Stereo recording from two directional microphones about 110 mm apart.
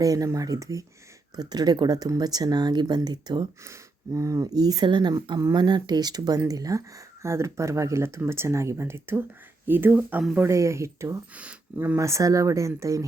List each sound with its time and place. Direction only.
0.0 s speech: 30° right (ahead or behind)
3.7 s speech: 30° right (ahead or behind)
11.3 s speech: 15° right (ahead or behind)
11.9 s speech: 25° right (ahead or behind)